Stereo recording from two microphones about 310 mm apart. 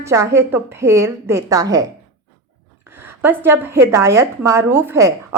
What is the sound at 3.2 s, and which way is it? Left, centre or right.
Speech, centre.